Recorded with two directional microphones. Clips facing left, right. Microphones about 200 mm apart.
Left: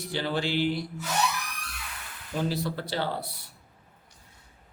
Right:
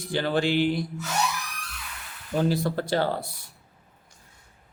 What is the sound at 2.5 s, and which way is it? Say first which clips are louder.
Speech: right 6 dB; 50° right (ahead or behind).